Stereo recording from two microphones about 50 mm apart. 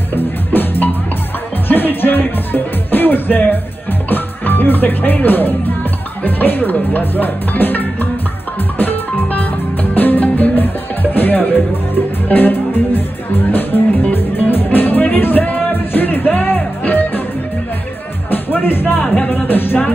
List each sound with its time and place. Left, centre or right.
0.1 s music: left
6.2 s speech: left
8.7 s music: left
18.3 s music: left